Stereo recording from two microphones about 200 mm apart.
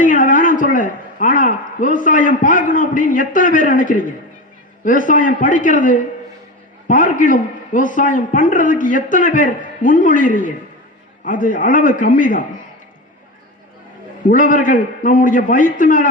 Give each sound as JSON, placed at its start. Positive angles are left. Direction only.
{"t": 0.0, "sound": "a man's voice", "side_deg": 40}
{"t": 14.3, "sound": "a man's voice", "side_deg": 40}